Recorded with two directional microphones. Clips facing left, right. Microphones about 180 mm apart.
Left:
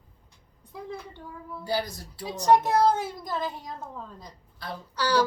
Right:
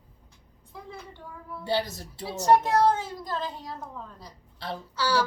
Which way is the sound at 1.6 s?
25° right (ahead or behind).